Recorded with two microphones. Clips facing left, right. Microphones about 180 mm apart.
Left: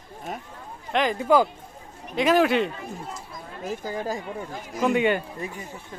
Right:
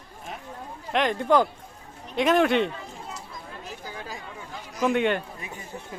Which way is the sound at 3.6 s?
45° left (ahead or behind).